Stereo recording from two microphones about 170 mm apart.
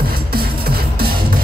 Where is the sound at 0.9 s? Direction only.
60° right (ahead or behind).